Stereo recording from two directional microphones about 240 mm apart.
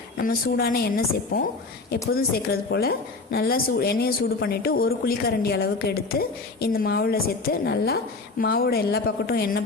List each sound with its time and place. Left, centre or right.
0.2 s speech: left